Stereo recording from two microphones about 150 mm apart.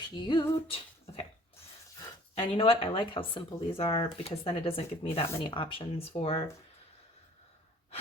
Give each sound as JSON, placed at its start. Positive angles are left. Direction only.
{"t": 0.1, "sound": "female singing", "side_deg": 30}
{"t": 2.3, "sound": "speech", "side_deg": 35}